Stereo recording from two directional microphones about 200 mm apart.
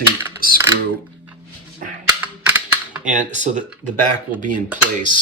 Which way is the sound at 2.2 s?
5° right (ahead or behind).